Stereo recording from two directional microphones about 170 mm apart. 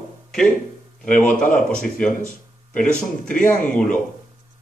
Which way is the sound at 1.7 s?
5° left (ahead or behind).